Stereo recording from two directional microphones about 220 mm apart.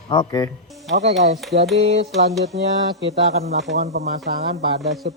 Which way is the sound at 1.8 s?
30° right (ahead or behind).